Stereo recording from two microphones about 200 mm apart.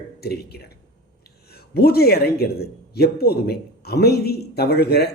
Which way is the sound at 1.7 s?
50° left (ahead or behind).